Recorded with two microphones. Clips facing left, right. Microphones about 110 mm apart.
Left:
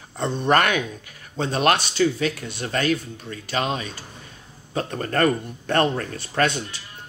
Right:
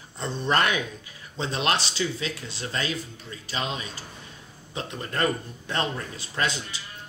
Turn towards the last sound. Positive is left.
turn(degrees=60)  # may be behind; listen again after turning